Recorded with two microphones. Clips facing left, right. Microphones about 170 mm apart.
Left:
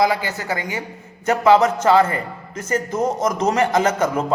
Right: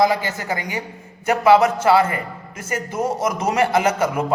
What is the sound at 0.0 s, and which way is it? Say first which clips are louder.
A man's voice: right 1 dB; 20° right (ahead or behind).